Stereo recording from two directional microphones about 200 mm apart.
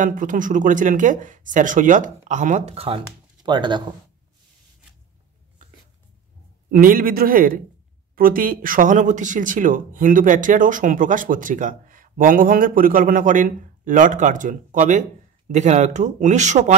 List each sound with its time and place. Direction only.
0.0 s speech: 40° right (ahead or behind); by 3.8 s 20° right (ahead or behind)
6.7 s speech: 45° right (ahead or behind)